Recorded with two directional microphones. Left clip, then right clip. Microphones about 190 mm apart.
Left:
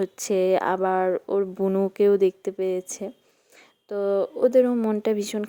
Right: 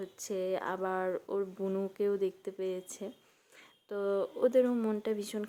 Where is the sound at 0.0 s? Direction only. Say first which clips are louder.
Left 13 dB; 40° left (ahead or behind).